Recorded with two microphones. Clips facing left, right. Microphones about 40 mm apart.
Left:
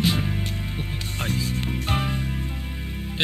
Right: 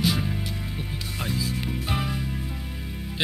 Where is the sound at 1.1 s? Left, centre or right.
Left.